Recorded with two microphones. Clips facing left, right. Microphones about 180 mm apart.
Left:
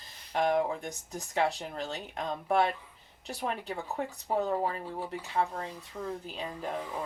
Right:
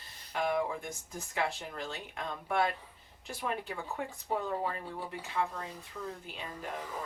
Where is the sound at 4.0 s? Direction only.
35° left (ahead or behind).